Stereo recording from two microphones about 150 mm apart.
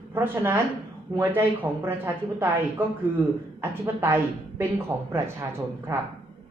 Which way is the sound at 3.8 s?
15° right (ahead or behind).